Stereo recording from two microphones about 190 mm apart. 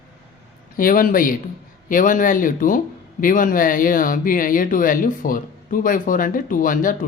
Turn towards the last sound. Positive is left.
turn(degrees=45)  # may be behind; listen again after turning